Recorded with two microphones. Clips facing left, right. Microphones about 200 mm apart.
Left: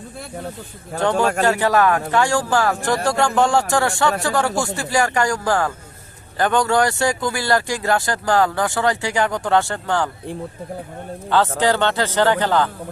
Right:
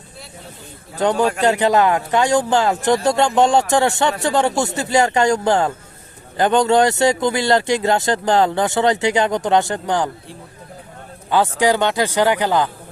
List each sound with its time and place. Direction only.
1.4 s speech: 20° right (ahead or behind)
11.3 s speech: 15° right (ahead or behind)